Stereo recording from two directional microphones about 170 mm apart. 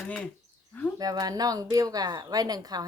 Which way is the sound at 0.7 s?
10° left (ahead or behind).